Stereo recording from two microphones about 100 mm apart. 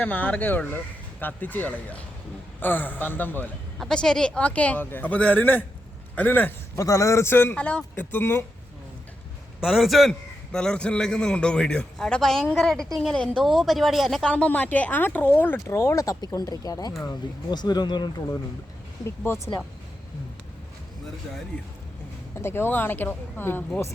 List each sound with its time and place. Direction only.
0.0 s a man's voice: 15° left (ahead or behind)
3.8 s a man's voice: 5° left (ahead or behind)
6.7 s speech: 30° left (ahead or behind)
7.5 s a man's voice: 10° left (ahead or behind)
9.6 s a man's voice: centre (ahead or behind)
14.3 s a man's voice: 15° left (ahead or behind)
15.6 s speech: 30° left (ahead or behind)
16.2 s speech: 40° left (ahead or behind)
19.0 s speech: 25° left (ahead or behind)
22.4 s speech: 25° left (ahead or behind)